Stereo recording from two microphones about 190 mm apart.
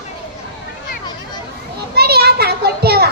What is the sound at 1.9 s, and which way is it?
Children playing, 55° right (ahead or behind).